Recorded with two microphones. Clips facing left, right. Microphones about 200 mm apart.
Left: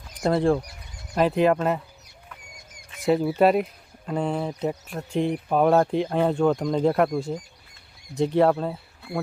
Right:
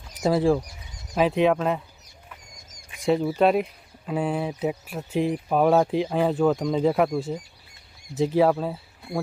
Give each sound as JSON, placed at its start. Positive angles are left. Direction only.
{"t": 0.1, "sound": "speech", "side_deg": -5}
{"t": 2.6, "sound": "a sound", "side_deg": 65}
{"t": 3.0, "sound": "speech", "side_deg": 0}